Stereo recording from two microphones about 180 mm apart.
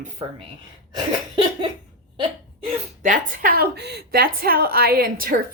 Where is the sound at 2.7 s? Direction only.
45° right (ahead or behind).